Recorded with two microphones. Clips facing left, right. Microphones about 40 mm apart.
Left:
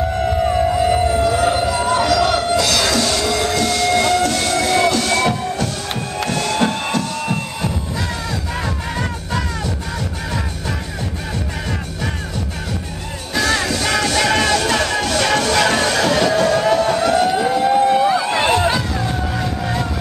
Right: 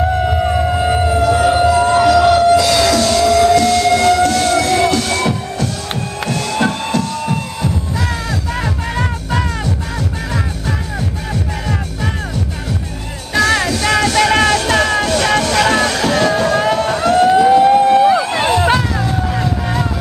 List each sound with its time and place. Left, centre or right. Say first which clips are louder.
0.2 s siren: right 1 dB; centre
2.2 s a sound: right 7 dB; centre
2.8 s music: right 5 dB; centre
3.9 s train: right 4 dB; centre
5.0 s music: even; centre
13.4 s music: right 4 dB; right
17.0 s siren: right 3 dB; centre
17.3 s vehicle: right 7 dB; centre
18.0 s a sound: right 3 dB; centre
18.7 s music: right 5 dB; right
19.4 s music: right 3 dB; centre